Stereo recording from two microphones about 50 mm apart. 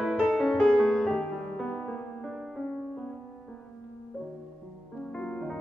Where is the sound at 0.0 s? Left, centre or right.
Centre.